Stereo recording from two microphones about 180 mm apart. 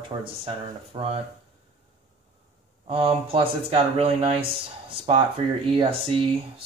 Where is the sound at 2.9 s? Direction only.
30° right (ahead or behind).